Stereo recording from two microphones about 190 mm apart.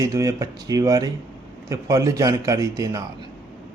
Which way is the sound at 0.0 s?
15° right (ahead or behind).